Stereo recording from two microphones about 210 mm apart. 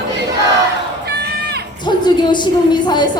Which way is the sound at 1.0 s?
50° right (ahead or behind).